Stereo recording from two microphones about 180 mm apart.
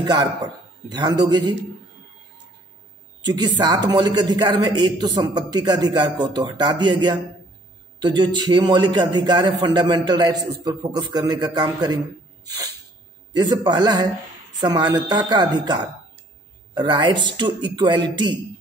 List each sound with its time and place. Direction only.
0.0 s a man's voice: 25° right (ahead or behind)
3.3 s a man's voice: 25° right (ahead or behind)
13.3 s a man's voice: 25° right (ahead or behind)